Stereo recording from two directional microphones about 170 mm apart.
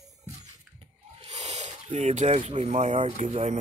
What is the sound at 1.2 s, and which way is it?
Speech, 40° right (ahead or behind).